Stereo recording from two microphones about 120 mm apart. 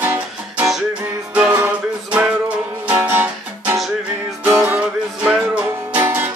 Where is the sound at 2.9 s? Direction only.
15° right (ahead or behind).